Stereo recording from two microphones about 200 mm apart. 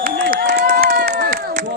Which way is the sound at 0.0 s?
50° right (ahead or behind).